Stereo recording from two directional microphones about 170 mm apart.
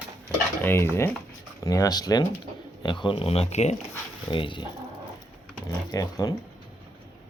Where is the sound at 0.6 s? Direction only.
15° left (ahead or behind); by 3.7 s 40° left (ahead or behind).